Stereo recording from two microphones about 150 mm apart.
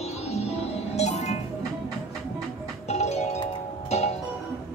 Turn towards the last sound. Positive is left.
turn(degrees=45)  # may be behind; listen again after turning